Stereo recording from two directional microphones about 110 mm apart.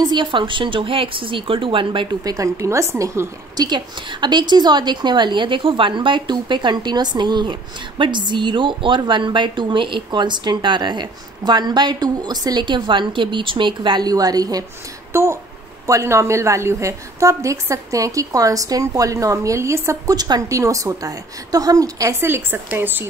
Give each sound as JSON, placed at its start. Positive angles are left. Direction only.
{"t": 0.0, "sound": "a woman's voice", "side_deg": -45}
{"t": 2.2, "sound": "a woman's voice", "side_deg": -30}
{"t": 15.1, "sound": "a woman's voice", "side_deg": -20}